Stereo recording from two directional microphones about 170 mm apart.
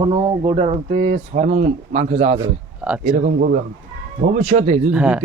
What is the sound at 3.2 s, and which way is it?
Speech, 55° right (ahead or behind).